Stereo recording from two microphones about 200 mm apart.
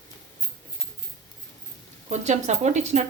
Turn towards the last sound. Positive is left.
turn(degrees=-35)  # may be behind; listen again after turning